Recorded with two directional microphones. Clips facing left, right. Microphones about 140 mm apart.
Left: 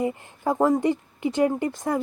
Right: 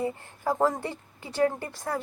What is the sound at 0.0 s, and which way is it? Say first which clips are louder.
Speech: left 4 dB; 15° left (ahead or behind).